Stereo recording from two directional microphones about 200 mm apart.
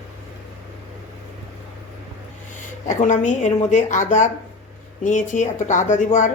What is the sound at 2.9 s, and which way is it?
Speech, 40° left (ahead or behind).